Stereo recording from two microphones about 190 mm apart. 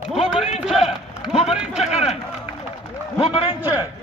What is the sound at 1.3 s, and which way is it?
Speech, 35° left (ahead or behind).